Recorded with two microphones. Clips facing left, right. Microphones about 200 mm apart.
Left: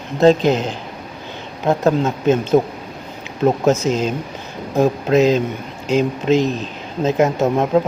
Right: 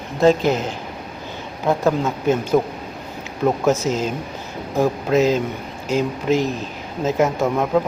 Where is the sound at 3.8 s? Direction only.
15° left (ahead or behind).